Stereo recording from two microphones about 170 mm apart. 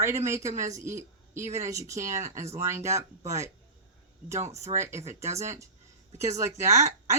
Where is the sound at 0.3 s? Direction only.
20° right (ahead or behind).